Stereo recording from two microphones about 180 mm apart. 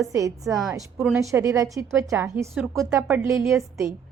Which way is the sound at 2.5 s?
Centre (ahead or behind).